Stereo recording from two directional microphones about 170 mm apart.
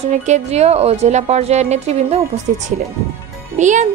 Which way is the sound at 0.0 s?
45° right (ahead or behind).